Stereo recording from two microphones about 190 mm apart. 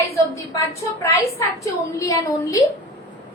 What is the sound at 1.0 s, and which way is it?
A woman's voice, 15° left (ahead or behind).